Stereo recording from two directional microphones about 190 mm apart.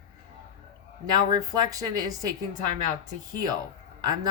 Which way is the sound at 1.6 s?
20° right (ahead or behind).